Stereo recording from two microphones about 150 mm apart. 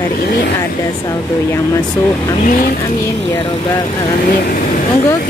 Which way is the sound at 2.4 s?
65° left (ahead or behind).